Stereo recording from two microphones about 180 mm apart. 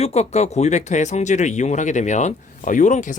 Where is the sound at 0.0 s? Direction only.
35° left (ahead or behind).